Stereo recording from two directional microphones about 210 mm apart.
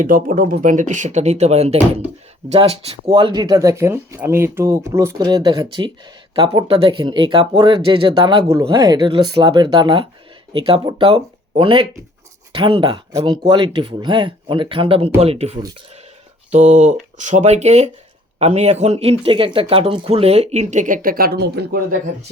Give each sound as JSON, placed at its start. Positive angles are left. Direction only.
{"t": 0.0, "sound": "speech", "side_deg": -40}